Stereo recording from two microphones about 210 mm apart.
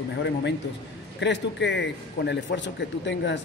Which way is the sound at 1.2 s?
55° left (ahead or behind).